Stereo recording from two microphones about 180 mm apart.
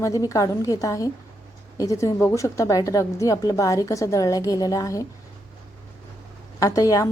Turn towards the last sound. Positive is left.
turn(degrees=20)  # may be behind; listen again after turning